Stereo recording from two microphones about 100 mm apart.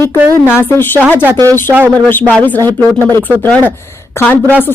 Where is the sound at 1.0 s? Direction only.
15° right (ahead or behind).